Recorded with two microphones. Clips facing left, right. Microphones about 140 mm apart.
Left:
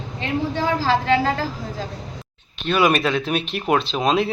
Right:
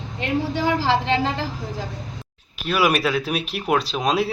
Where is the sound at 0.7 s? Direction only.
20° right (ahead or behind).